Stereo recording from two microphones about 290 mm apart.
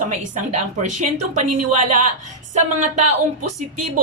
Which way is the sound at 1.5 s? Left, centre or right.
Right.